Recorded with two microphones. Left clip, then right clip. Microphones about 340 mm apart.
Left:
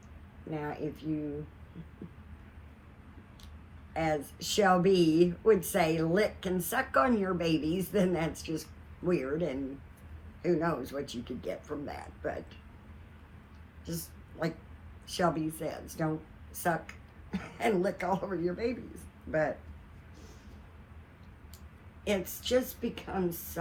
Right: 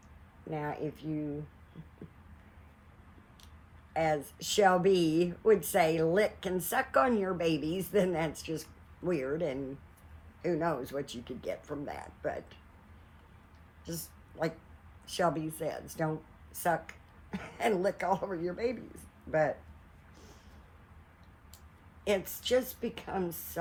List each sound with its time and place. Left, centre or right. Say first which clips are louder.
0.5 s speech: even; right
3.9 s speech: right 1 dB; right
13.8 s a sound: left 1 dB; right
15.0 s speech: left 1 dB; right
22.0 s speech: right 1 dB; right